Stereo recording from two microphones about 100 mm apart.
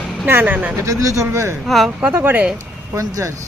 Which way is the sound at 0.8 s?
35° right (ahead or behind).